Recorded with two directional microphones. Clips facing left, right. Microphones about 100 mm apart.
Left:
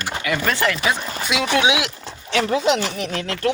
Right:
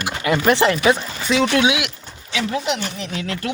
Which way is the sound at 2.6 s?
90° left.